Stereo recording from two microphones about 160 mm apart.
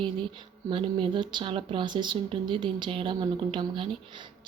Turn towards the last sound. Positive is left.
turn(degrees=-30)  # may be behind; listen again after turning